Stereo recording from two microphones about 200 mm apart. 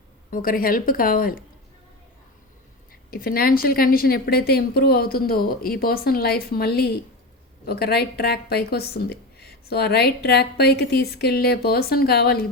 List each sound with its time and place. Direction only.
0.3 s speech: 45° left (ahead or behind)
3.1 s speech: 45° left (ahead or behind)